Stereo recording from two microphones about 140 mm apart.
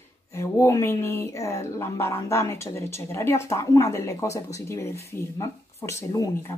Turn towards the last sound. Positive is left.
turn(degrees=25)  # may be behind; listen again after turning